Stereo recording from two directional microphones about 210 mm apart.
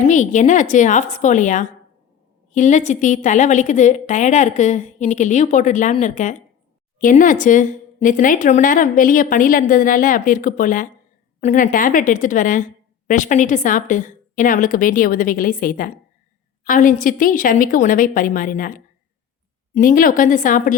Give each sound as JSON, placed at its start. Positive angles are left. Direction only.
{"t": 0.1, "sound": "a woman's voice", "side_deg": 35}